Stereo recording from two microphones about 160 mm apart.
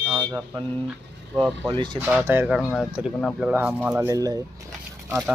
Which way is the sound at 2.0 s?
10° right (ahead or behind).